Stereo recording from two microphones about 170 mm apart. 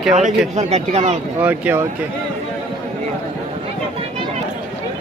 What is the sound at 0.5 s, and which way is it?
Speech, 40° right (ahead or behind).